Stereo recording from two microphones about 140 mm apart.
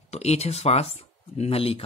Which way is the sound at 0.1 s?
50° left (ahead or behind).